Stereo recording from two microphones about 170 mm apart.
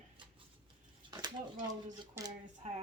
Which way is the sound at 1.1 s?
25° right (ahead or behind).